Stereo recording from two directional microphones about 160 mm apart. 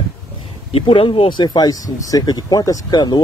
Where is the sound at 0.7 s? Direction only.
35° left (ahead or behind).